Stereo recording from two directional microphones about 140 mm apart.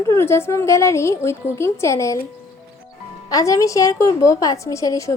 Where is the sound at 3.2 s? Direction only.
25° left (ahead or behind).